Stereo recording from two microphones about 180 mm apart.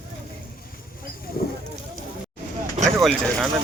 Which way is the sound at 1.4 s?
60° left (ahead or behind).